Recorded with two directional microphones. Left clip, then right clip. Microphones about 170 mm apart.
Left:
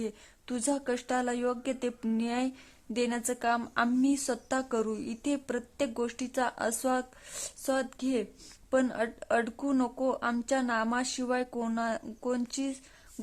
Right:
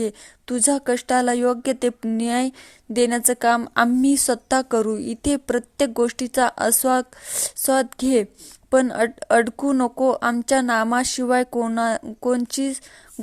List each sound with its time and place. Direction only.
0.0 s a woman's voice: 30° right (ahead or behind)